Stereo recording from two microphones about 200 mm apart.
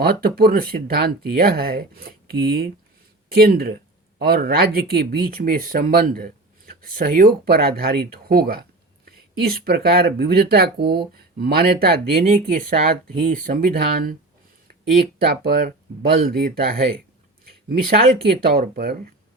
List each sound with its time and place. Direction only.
0.0 s speech: 50° right (ahead or behind)
16.3 s speech: 50° right (ahead or behind)